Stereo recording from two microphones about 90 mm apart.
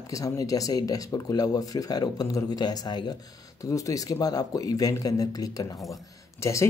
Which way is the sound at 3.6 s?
40° left (ahead or behind).